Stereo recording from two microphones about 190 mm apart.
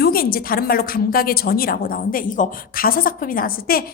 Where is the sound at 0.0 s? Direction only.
50° left (ahead or behind).